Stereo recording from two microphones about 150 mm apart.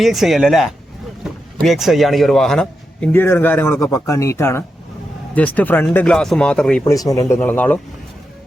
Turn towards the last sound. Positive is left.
turn(degrees=10)  # may be behind; listen again after turning